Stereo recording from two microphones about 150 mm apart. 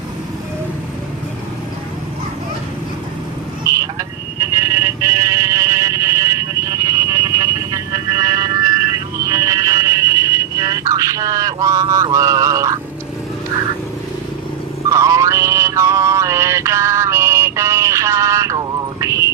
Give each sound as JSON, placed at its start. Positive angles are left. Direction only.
{"t": 3.7, "sound": "vehicle", "side_deg": -25}
{"t": 5.2, "sound": "music", "side_deg": -25}
{"t": 14.8, "sound": "music", "side_deg": -20}